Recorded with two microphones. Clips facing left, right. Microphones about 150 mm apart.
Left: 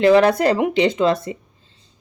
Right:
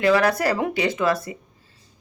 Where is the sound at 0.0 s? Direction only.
25° left (ahead or behind).